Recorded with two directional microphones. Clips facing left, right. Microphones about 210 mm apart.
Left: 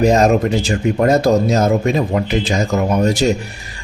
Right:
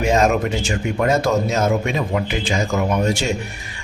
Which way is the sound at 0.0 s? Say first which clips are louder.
Left 4 dB; 40° left (ahead or behind).